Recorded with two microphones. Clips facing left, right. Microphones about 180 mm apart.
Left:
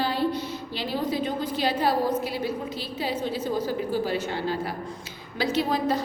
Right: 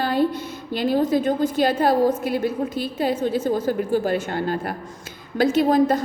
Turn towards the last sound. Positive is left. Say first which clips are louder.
# right 7 dB
turn(degrees=-50)  # may be behind; listen again after turning